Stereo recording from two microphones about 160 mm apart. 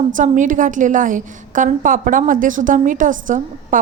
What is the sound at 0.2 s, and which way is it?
A woman's voice, 55° right (ahead or behind).